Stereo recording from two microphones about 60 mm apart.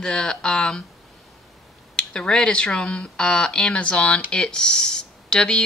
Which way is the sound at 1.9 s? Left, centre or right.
Centre.